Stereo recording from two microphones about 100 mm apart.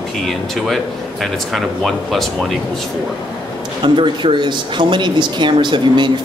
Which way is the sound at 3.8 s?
55° right (ahead or behind).